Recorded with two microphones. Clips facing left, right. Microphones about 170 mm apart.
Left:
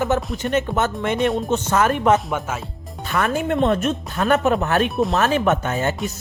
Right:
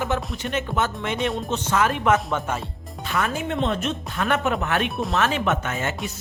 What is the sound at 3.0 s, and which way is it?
Speech, 50° left (ahead or behind).